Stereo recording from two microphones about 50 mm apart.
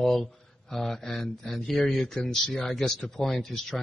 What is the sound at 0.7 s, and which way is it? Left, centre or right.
Speech, centre.